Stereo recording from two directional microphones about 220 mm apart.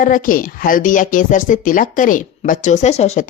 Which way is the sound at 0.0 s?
40° left (ahead or behind).